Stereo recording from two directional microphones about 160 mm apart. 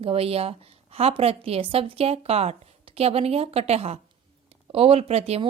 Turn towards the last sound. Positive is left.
turn(degrees=-40)  # may be behind; listen again after turning